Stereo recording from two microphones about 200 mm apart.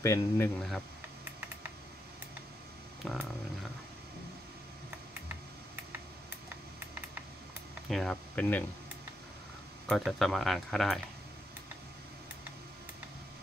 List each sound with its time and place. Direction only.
0.0 s speech: 15° left (ahead or behind)
0.6 s speech: 5° left (ahead or behind)
3.0 s a sound: centre (ahead or behind)
7.9 s speech: 5° left (ahead or behind)
9.8 s speech: centre (ahead or behind)